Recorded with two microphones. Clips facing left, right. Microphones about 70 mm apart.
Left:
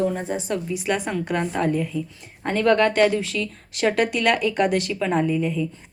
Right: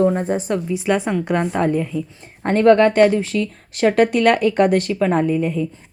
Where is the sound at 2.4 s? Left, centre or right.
Right.